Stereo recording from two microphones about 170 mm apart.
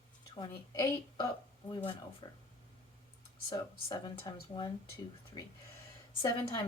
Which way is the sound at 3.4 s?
25° left (ahead or behind).